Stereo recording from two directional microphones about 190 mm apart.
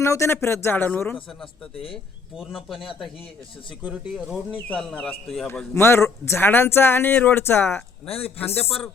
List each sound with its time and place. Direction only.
0.0 s speech: 15° left (ahead or behind)
5.5 s speech: 10° left (ahead or behind)
8.0 s speech: 30° left (ahead or behind)